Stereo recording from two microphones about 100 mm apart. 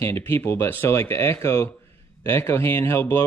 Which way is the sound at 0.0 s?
25° left (ahead or behind).